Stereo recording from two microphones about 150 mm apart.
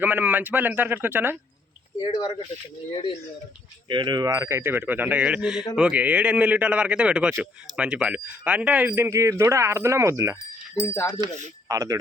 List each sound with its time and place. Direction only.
0.0 s a man's voice: 10° right (ahead or behind)
2.0 s speech: 30° left (ahead or behind)
3.8 s a man's voice: 30° right (ahead or behind)
10.8 s speech: 20° left (ahead or behind)
11.7 s speech: 20° right (ahead or behind)